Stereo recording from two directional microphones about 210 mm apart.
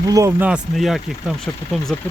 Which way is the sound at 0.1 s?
15° right (ahead or behind).